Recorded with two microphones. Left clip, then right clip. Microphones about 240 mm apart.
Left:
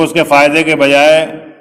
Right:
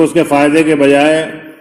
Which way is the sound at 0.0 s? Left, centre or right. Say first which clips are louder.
Left 2 dB; centre.